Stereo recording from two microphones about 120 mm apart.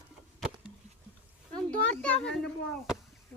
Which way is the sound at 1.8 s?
10° left (ahead or behind).